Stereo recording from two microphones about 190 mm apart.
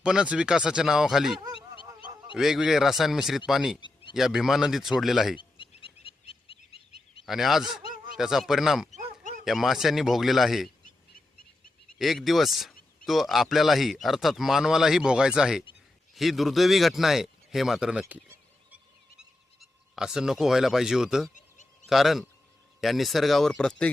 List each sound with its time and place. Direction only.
0.0 s speech: 5° right (ahead or behind)
1.5 s goose: 25° left (ahead or behind)
2.3 s speech: 5° right (ahead or behind)
3.8 s a sound: 25° left (ahead or behind)
4.1 s speech: centre (ahead or behind)
5.4 s a sound: 25° left (ahead or behind)
7.3 s speech: centre (ahead or behind)
7.8 s a sound: 50° right (ahead or behind)
8.1 s speech: centre (ahead or behind)
11.9 s speech: centre (ahead or behind)
19.5 s speech: 5° right (ahead or behind)
21.3 s a sound: 40° left (ahead or behind)
21.8 s speech: centre (ahead or behind)